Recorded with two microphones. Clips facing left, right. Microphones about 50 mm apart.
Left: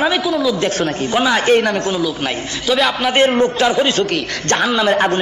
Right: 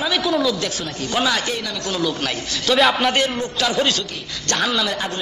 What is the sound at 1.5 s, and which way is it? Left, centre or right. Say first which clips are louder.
Speech: left 12 dB; left.